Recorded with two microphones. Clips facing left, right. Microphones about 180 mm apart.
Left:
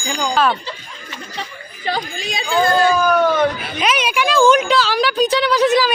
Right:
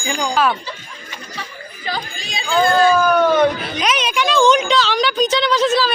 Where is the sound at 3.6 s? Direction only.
5° left (ahead or behind).